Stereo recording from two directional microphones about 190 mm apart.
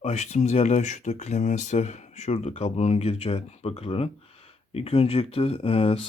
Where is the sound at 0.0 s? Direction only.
35° left (ahead or behind).